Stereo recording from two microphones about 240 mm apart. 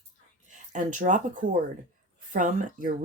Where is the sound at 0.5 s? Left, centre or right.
Right.